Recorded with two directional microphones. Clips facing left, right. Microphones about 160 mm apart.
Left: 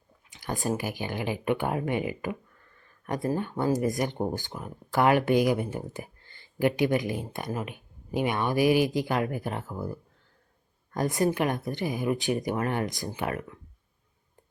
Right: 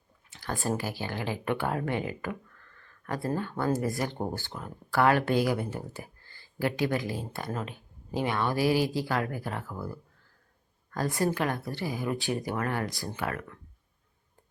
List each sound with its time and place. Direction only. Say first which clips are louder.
0.3 s speech: left 1 dB; 15° left (ahead or behind)
2.7 s a sound: left 3 dB; 20° left (ahead or behind)
3.6 s speech: left 3 dB; 20° left (ahead or behind)